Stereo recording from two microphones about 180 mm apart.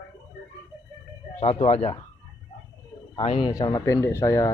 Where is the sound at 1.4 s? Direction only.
35° left (ahead or behind).